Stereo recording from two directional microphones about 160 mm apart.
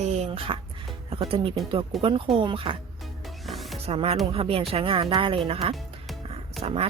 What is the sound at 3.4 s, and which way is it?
Music, centre (ahead or behind).